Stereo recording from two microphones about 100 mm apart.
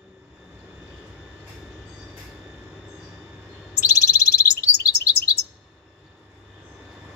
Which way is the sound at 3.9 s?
40° left (ahead or behind).